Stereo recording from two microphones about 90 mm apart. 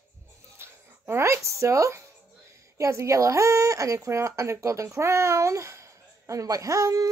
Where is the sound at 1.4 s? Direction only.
35° right (ahead or behind).